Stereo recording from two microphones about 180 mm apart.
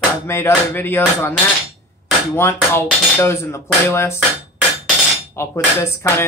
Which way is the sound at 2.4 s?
15° left (ahead or behind).